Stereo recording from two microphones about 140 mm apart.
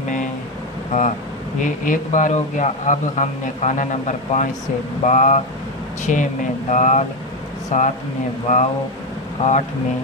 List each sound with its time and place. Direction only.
0.9 s speech: 65° left (ahead or behind)
9.4 s speech: 55° left (ahead or behind)